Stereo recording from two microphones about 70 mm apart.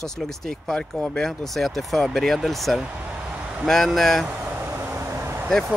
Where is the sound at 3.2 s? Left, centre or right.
Centre.